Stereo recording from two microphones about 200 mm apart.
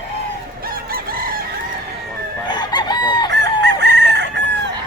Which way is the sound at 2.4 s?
20° left (ahead or behind).